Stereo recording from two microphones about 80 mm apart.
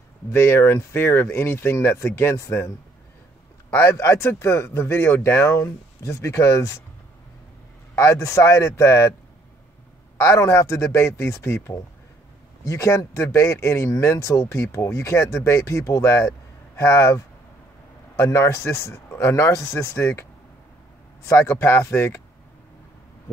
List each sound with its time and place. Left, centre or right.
0.3 s speech: left
3.7 s speech: left
7.9 s speech: left
10.1 s speech: left
21.3 s speech: left